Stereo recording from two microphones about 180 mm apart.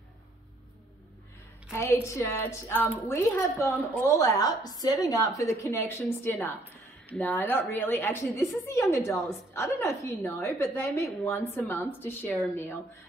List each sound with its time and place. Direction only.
1.7 s a woman's voice: 15° left (ahead or behind)